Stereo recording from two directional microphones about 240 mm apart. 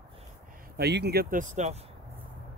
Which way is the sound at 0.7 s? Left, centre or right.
Right.